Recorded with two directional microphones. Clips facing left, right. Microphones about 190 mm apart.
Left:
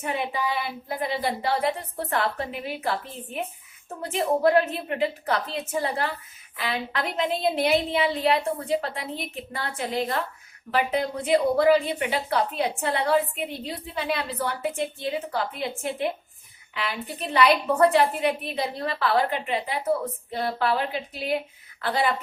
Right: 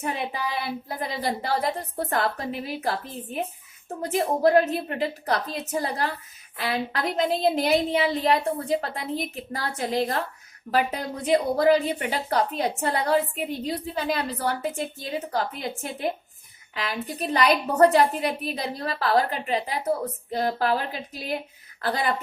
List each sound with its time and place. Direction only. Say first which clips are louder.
0.6 s a woman's voice: left 1 dB; 40° right (ahead or behind)